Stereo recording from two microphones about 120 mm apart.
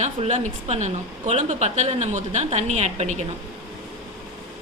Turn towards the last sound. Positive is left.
turn(degrees=-70)  # may be behind; listen again after turning